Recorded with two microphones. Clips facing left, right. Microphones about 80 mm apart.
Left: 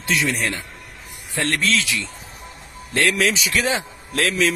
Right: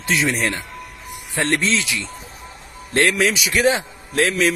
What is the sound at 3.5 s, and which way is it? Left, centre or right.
Speech, right.